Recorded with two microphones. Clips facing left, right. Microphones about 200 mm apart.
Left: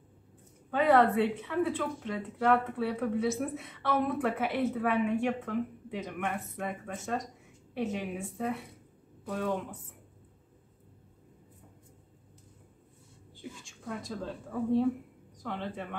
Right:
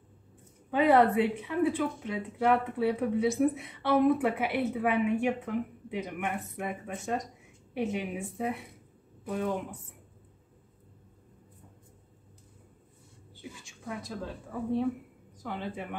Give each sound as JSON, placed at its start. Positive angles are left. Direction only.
{"t": 0.7, "sound": "a woman's voice", "side_deg": -15}
{"t": 13.4, "sound": "a woman's voice", "side_deg": 0}